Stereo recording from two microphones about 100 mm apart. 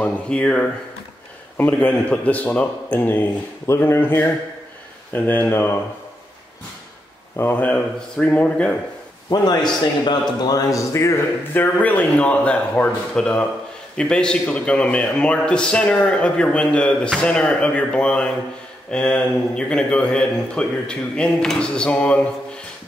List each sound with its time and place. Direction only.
0.0 s a man's voice: 15° left (ahead or behind)
7.3 s a man's voice: 20° left (ahead or behind)
9.3 s a man's voice: 45° left (ahead or behind); by 22.2 s 15° left (ahead or behind)